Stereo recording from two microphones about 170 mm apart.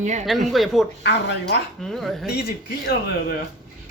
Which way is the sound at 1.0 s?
90° left.